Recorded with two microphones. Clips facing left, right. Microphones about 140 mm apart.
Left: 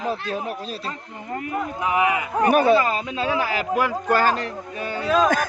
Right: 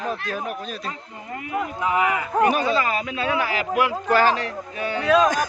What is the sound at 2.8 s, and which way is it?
Speech, 30° left (ahead or behind).